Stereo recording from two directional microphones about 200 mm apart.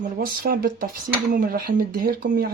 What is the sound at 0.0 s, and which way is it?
Speech, 50° right (ahead or behind).